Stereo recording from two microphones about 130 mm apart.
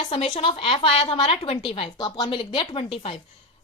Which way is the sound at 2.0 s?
35° left (ahead or behind).